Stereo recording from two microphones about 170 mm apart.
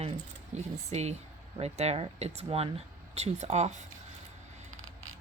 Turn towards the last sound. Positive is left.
turn(degrees=-40)  # may be behind; listen again after turning